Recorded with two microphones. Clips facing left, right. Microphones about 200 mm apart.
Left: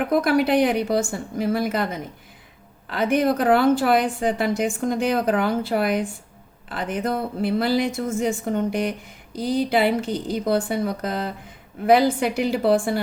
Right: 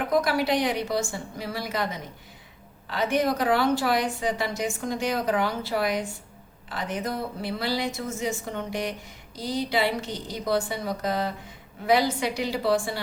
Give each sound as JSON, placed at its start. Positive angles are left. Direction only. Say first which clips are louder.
{"t": 0.1, "sound": "a woman's voice", "louder": "left 4 dB", "side_deg": 55}